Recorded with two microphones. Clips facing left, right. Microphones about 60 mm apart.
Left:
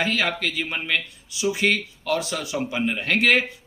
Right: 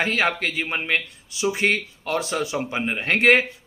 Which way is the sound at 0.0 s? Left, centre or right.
Right.